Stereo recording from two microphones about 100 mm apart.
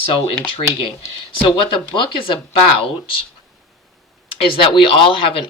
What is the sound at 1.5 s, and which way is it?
Speech, 55° left (ahead or behind).